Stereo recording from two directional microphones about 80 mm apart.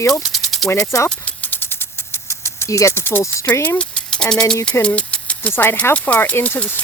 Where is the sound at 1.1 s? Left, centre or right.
Centre; by 3.5 s left.